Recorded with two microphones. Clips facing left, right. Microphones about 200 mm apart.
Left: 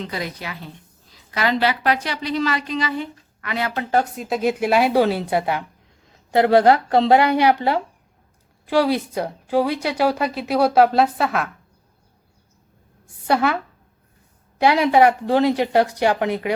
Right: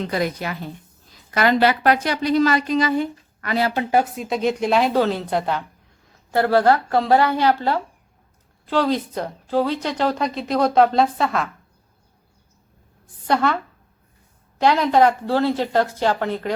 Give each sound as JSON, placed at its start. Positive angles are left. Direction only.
{"t": 0.0, "sound": "a woman's voice", "side_deg": -50}
{"t": 4.0, "sound": "a woman's voice", "side_deg": 0}
{"t": 13.2, "sound": "a woman's voice", "side_deg": 10}
{"t": 14.6, "sound": "a woman's voice", "side_deg": 10}